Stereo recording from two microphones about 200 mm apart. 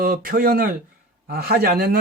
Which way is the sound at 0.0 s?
45° right (ahead or behind).